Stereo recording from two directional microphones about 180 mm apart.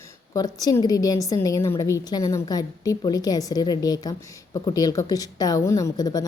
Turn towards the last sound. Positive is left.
turn(degrees=20)  # may be behind; listen again after turning